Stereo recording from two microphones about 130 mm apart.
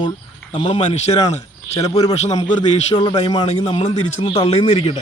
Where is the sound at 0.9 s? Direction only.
60° left (ahead or behind).